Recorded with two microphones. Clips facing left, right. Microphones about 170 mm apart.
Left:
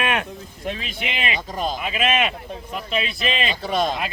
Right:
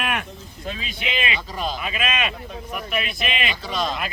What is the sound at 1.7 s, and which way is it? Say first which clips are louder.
Speech: left 4 dB; 25° left (ahead or behind).